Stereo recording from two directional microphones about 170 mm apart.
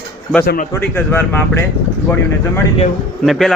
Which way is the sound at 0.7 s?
10° left (ahead or behind).